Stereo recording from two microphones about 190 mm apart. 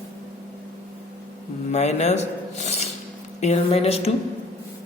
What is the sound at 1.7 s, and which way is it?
A man's voice, 35° left (ahead or behind).